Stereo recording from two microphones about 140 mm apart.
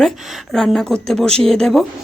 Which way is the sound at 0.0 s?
Centre (ahead or behind).